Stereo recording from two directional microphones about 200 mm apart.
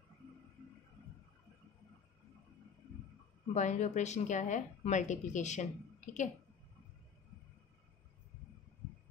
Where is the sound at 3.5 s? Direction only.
35° left (ahead or behind).